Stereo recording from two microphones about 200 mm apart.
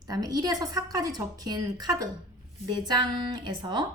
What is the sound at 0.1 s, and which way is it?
A woman's voice, 20° right (ahead or behind).